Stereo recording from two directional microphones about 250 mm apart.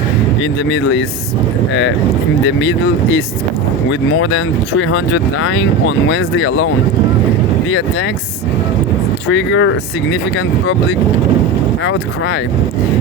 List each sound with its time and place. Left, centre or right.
0.7 s speech: left
2.6 s speech: left
9.3 s speech: left